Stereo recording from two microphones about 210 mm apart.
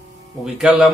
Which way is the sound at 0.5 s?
5° right (ahead or behind).